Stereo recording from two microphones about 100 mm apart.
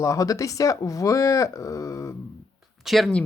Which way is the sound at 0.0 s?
35° left (ahead or behind).